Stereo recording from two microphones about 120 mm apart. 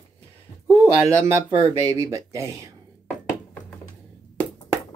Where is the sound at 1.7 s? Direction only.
30° right (ahead or behind).